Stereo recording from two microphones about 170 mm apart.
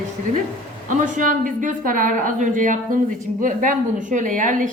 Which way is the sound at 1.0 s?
50° right (ahead or behind).